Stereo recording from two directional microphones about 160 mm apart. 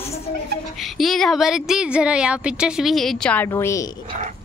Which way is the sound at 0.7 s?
Centre (ahead or behind).